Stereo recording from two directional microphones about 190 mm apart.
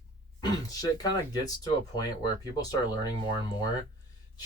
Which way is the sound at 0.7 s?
20° left (ahead or behind).